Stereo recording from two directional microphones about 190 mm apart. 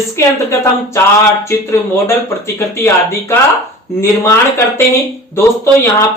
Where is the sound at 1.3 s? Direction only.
15° left (ahead or behind).